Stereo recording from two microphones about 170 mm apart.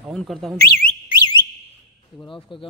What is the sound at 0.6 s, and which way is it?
Speech, 60° left (ahead or behind).